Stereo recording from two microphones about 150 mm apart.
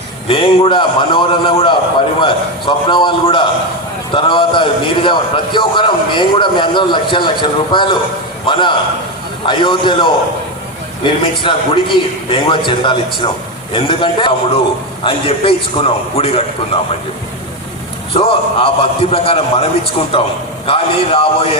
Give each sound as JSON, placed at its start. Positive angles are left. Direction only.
{"t": 0.3, "sound": "a man's voice", "side_deg": 35}
{"t": 18.1, "sound": "a man's voice", "side_deg": 40}